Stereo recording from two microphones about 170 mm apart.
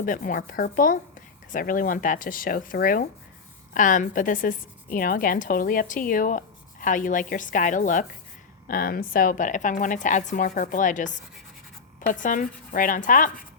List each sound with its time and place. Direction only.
0.0 s speech: 50° left (ahead or behind)